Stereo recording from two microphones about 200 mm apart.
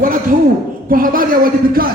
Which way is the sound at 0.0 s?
45° right (ahead or behind).